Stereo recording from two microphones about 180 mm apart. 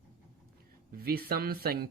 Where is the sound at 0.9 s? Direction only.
55° right (ahead or behind).